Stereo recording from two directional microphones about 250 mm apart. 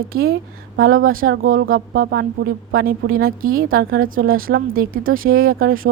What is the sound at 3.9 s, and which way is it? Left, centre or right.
Speech, right.